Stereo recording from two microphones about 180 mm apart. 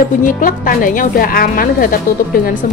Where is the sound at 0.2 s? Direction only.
50° left (ahead or behind).